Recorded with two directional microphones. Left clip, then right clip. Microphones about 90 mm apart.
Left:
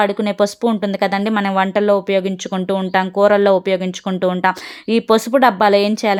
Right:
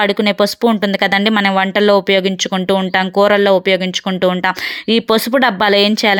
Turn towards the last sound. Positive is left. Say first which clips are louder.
# right 2 dB
turn(degrees=-15)  # may be behind; listen again after turning